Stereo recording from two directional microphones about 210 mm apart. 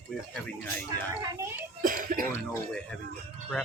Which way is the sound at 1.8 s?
40° right (ahead or behind).